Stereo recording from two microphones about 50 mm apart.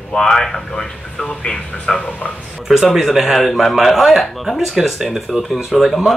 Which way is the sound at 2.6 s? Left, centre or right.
Centre.